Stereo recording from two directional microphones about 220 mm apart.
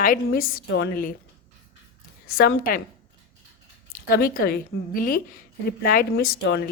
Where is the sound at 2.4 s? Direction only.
40° left (ahead or behind).